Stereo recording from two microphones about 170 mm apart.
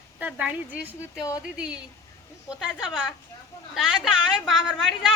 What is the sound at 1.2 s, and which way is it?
Speech, 20° left (ahead or behind).